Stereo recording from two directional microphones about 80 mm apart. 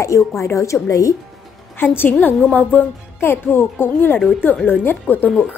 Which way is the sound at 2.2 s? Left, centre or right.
Left.